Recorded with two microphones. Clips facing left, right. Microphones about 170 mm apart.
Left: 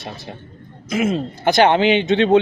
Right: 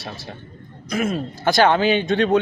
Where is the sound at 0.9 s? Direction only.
20° left (ahead or behind).